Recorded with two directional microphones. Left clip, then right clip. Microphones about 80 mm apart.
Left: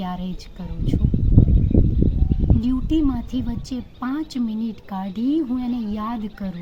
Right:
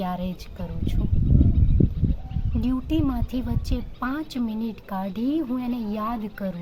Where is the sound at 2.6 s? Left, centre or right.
Right.